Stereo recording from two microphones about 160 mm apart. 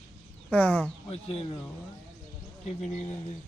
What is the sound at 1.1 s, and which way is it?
Speech, 40° left (ahead or behind).